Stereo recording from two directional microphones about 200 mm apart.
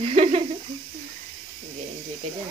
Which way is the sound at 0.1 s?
30° right (ahead or behind).